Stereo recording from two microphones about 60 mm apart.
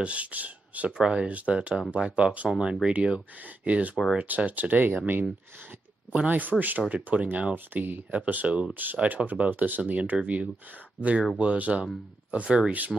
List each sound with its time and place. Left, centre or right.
0.0 s speech: right
6.2 s speech: right
7.5 s speech: right; by 12.7 s centre